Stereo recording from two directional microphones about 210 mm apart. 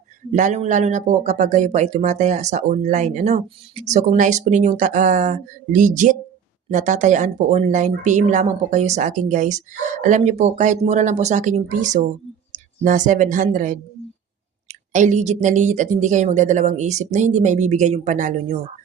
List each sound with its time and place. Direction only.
0.3 s a woman's voice: 35° right (ahead or behind)